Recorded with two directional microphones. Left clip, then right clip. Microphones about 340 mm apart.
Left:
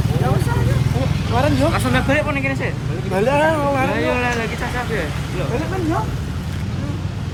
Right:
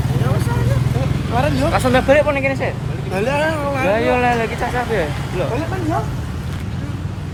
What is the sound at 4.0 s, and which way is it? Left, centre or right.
Speech, centre.